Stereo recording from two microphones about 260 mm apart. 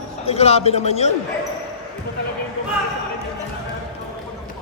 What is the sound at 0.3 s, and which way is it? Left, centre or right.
Speech, left.